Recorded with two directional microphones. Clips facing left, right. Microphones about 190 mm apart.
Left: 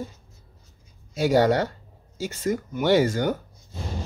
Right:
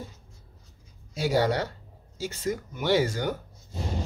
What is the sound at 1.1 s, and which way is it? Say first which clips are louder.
Speech: left 5 dB; 50° left (ahead or behind).